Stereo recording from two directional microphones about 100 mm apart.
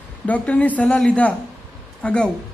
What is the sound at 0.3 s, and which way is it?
A woman's voice, 15° left (ahead or behind).